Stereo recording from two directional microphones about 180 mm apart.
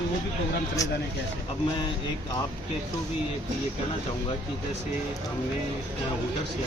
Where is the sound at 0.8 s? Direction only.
20° left (ahead or behind).